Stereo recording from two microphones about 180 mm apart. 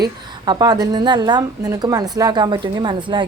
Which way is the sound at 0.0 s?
20° right (ahead or behind).